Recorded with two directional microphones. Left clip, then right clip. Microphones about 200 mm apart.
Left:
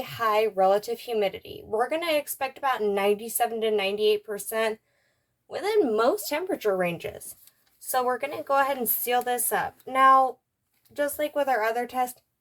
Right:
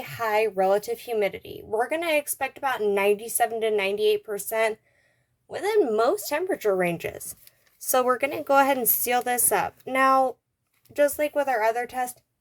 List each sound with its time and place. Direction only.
0.0 s a woman's voice: 15° right (ahead or behind)